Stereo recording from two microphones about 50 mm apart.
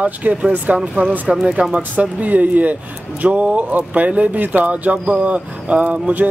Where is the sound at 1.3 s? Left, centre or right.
Centre.